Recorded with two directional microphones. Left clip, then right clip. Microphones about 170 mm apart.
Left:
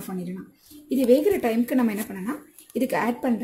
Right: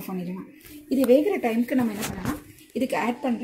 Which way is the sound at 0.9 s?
15° left (ahead or behind).